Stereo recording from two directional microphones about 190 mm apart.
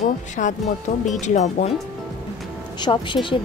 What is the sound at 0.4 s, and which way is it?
Speech, 45° left (ahead or behind).